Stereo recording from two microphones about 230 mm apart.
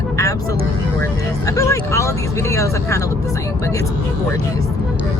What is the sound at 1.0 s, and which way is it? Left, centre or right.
Speech, centre.